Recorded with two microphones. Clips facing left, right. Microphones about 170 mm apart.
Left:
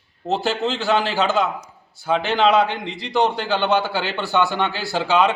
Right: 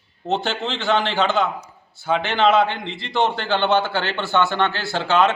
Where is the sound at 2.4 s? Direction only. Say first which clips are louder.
Right 1 dB; 15° left (ahead or behind).